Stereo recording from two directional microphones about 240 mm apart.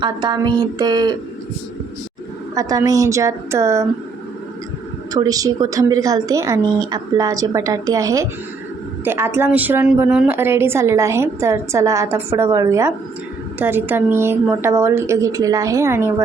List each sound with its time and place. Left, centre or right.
0.0 s a woman's voice: centre
2.6 s a woman's voice: centre
5.1 s a woman's voice: centre